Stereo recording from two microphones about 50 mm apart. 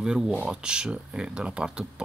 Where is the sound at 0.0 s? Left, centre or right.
Centre.